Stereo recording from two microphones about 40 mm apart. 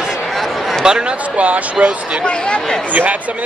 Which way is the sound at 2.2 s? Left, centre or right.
Left.